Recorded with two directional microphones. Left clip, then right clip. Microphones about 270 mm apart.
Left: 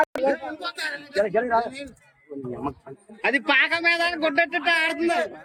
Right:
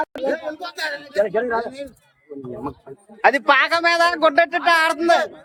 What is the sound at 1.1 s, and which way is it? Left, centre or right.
A man's voice, centre.